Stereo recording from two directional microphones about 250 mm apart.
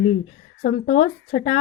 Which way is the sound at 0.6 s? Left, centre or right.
Left.